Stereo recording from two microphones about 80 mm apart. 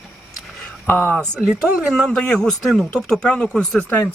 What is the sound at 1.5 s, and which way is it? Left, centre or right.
Speech, centre.